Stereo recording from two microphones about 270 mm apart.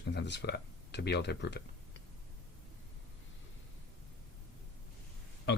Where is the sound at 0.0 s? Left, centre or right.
Left.